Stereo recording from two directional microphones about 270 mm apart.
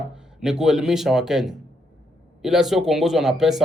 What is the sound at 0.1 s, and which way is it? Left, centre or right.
Speech, centre.